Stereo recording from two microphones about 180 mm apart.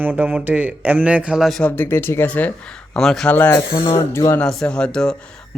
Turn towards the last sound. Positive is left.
turn(degrees=5)  # may be behind; listen again after turning